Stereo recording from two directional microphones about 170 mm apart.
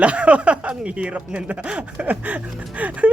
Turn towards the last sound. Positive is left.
turn(degrees=-10)  # may be behind; listen again after turning